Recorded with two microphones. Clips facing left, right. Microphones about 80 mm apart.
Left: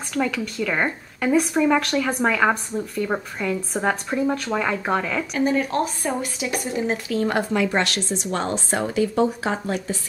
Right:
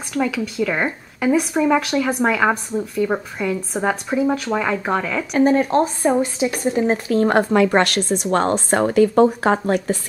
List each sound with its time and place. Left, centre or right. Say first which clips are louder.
0.1 s speech: right 3 dB; centre
5.3 s speech: right 7 dB; right